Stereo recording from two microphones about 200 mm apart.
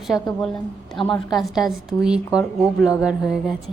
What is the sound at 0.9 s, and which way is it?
Speech, 25° left (ahead or behind).